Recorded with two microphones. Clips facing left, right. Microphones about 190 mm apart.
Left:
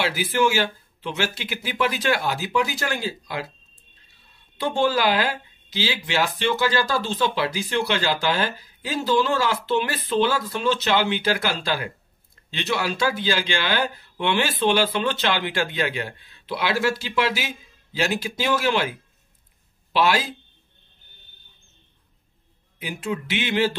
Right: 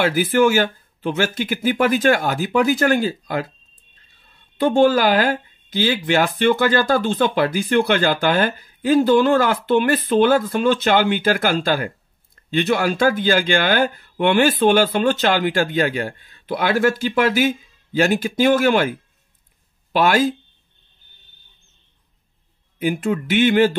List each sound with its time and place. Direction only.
0.0 s speech: 50° right (ahead or behind)
4.6 s speech: 50° right (ahead or behind)
22.8 s speech: 50° right (ahead or behind)